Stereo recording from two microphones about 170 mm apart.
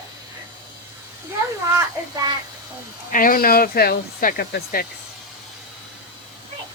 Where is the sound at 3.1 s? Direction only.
55° left (ahead or behind).